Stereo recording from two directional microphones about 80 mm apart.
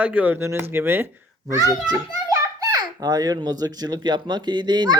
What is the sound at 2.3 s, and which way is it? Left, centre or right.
A child's voice, right.